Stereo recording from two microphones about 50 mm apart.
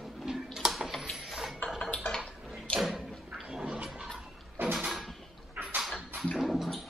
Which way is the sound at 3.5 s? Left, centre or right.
Centre.